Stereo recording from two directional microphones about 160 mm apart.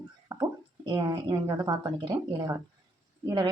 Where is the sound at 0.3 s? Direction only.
20° right (ahead or behind).